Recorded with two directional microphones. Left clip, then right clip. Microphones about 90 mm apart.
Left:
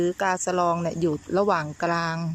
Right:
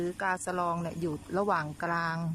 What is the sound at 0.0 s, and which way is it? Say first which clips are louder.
Speech: left 7 dB; 30° left (ahead or behind).